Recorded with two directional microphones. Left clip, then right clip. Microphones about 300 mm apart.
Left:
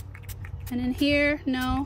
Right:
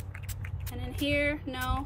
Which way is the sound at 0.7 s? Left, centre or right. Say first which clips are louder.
Left 6 dB; left.